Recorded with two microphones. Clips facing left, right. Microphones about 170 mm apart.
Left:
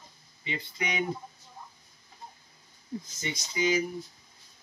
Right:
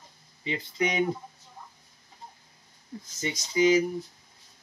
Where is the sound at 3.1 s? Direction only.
35° right (ahead or behind).